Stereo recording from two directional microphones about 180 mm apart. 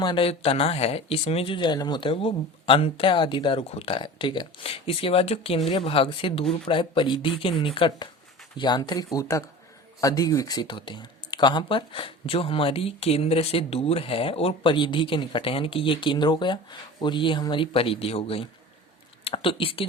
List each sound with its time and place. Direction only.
0.0 s speech: 25° left (ahead or behind)